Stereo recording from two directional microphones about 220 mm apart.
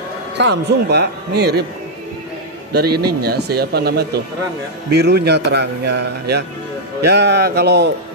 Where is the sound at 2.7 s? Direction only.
45° right (ahead or behind).